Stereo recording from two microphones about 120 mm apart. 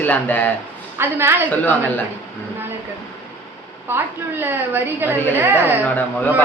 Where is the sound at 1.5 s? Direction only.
15° left (ahead or behind).